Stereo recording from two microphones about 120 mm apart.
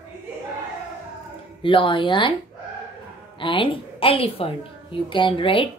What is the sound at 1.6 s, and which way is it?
Speech, 45° left (ahead or behind).